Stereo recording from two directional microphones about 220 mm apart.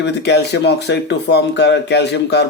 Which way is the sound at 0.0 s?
50° left (ahead or behind).